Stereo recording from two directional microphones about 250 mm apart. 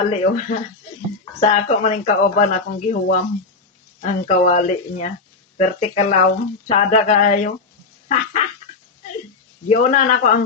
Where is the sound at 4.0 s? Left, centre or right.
Left.